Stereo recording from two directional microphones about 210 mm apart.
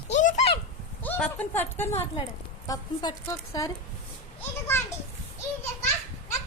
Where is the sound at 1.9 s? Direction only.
30° left (ahead or behind).